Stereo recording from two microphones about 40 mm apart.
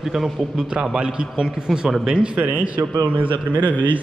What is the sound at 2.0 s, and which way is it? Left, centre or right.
Speech, right.